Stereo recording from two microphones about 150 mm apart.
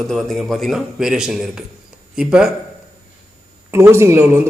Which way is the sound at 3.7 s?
15° right (ahead or behind).